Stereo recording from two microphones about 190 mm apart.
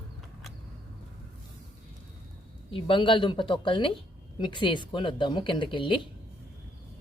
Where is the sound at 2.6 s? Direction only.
25° left (ahead or behind).